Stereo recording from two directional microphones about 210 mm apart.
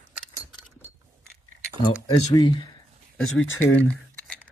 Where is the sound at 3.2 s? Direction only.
65° left (ahead or behind).